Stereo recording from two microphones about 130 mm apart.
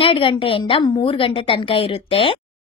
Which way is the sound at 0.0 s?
45° left (ahead or behind).